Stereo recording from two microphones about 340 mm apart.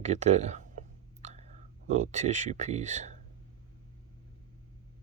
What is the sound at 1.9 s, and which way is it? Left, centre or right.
Speech, right.